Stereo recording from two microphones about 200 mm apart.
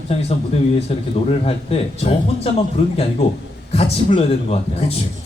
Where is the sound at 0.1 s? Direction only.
30° left (ahead or behind).